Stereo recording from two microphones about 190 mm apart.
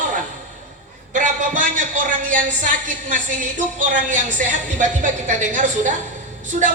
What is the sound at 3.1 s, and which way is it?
A woman's voice, 45° right (ahead or behind).